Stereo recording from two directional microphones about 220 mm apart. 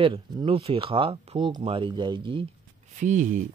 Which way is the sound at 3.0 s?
35° right (ahead or behind).